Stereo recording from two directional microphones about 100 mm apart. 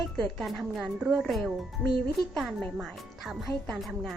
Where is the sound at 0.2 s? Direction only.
5° left (ahead or behind).